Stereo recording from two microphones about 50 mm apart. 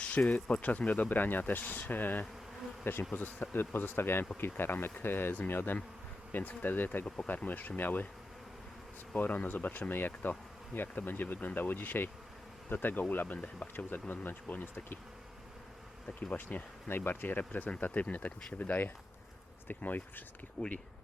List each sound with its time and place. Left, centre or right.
0.0 s speech: left
2.8 s speech: left
9.1 s speech: left
16.3 s speech: left
16.9 s speech: left
19.6 s speech: left
20.6 s speech: centre